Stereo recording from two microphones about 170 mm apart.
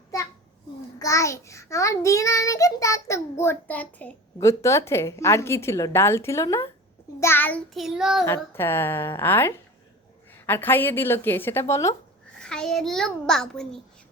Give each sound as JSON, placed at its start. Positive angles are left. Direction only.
{"t": 0.1, "sound": "child singing", "side_deg": 20}
{"t": 0.9, "sound": "a child's voice", "side_deg": 20}
{"t": 7.7, "sound": "a child's voice", "side_deg": 0}
{"t": 8.5, "sound": "a child's voice", "side_deg": 15}
{"t": 12.4, "sound": "a child's voice", "side_deg": 5}